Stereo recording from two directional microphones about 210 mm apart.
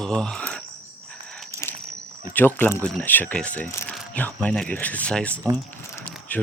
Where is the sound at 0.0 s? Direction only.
5° left (ahead or behind).